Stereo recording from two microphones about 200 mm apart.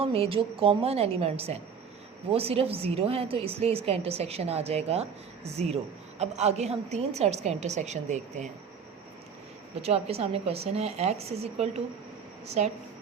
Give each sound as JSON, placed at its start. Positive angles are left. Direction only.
{"t": 0.0, "sound": "a woman's voice", "side_deg": -30}
{"t": 9.8, "sound": "a woman's voice", "side_deg": -30}